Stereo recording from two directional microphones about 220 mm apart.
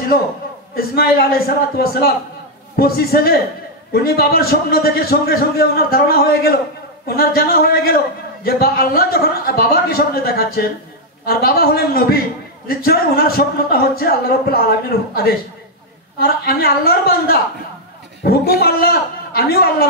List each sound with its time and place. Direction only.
0.7 s a man's voice: 45° left (ahead or behind)